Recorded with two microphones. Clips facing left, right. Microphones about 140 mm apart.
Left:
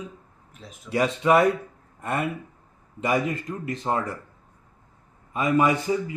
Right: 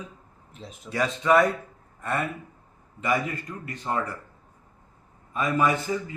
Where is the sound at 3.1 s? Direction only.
20° left (ahead or behind).